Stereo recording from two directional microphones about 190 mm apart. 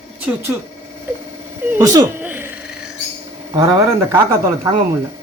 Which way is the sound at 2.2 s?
10° right (ahead or behind).